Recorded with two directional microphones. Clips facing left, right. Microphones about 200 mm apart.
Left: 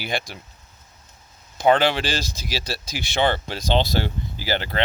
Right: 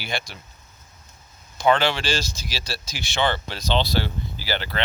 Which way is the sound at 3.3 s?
50° left (ahead or behind).